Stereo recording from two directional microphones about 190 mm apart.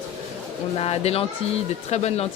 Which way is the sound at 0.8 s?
30° left (ahead or behind).